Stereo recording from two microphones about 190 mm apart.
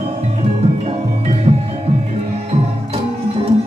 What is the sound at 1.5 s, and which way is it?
Music, 35° right (ahead or behind).